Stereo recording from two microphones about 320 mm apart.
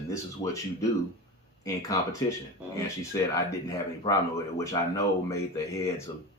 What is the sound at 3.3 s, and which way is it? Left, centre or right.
Speech, centre.